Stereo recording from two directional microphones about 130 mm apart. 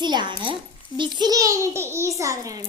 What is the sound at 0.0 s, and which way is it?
A child's voice, 35° right (ahead or behind).